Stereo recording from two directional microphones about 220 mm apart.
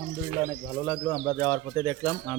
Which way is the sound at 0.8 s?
10° left (ahead or behind).